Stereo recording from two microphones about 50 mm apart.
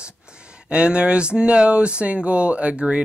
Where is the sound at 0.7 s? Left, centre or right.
Right.